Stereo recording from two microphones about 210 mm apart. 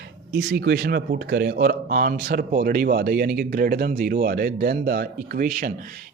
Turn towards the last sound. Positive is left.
turn(degrees=-45)  # may be behind; listen again after turning